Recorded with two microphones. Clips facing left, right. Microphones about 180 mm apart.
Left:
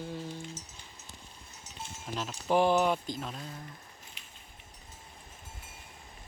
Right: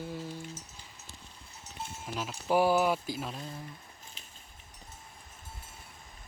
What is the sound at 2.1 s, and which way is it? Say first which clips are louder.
Speech: even; 5° right (ahead or behind).